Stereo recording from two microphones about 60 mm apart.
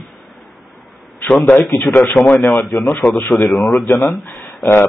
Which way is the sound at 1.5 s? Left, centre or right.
Left.